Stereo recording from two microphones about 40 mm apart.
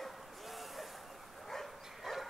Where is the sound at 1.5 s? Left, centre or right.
Centre.